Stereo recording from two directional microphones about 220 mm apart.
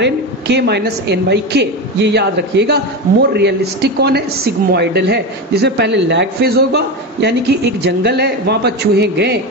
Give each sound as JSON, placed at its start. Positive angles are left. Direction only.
{"t": 0.0, "sound": "a man's voice", "side_deg": -50}